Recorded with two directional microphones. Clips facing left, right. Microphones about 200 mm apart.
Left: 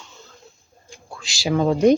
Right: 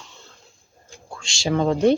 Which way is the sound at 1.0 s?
5° left (ahead or behind).